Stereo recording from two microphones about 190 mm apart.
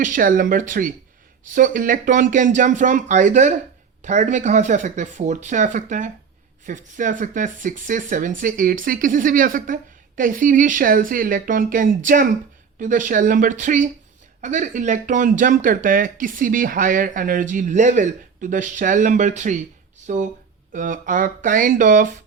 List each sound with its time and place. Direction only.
0.0 s speech: 45° right (ahead or behind)